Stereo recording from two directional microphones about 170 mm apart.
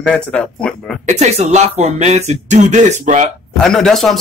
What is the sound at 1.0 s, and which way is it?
Speech, 40° right (ahead or behind).